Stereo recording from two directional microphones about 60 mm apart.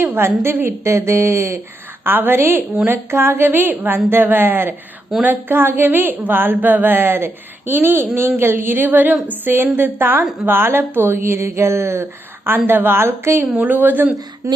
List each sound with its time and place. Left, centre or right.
0.0 s speech: right
2.0 s a woman's voice: right
12.5 s a woman's voice: right
13.6 s a woman's voice: right
14.4 s speech: right